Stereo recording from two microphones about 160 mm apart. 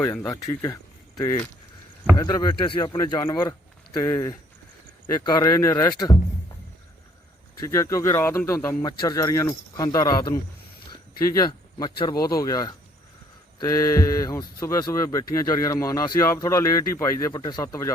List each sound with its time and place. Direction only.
0.0 s speech: 15° left (ahead or behind)
7.6 s speech: 20° left (ahead or behind)
11.2 s speech: 20° left (ahead or behind)